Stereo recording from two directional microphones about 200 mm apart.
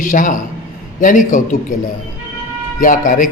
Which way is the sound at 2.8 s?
40° left (ahead or behind).